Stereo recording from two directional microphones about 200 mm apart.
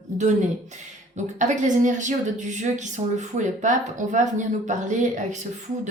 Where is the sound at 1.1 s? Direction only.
35° right (ahead or behind).